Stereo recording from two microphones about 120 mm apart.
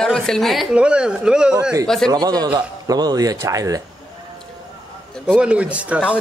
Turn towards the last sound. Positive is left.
turn(degrees=-10)  # may be behind; listen again after turning